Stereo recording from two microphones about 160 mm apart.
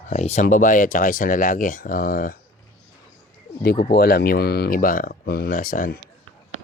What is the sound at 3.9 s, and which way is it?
Speech, 75° left (ahead or behind).